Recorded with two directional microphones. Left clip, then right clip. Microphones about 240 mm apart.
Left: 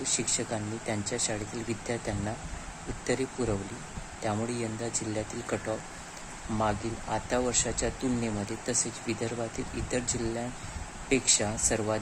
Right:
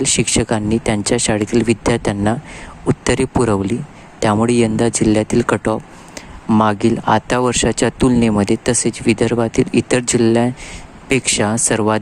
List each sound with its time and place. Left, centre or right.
0.0 s speech: right